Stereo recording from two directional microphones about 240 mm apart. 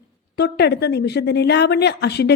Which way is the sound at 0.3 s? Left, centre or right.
Left.